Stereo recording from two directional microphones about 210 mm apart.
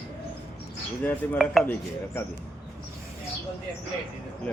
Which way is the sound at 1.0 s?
5° left (ahead or behind).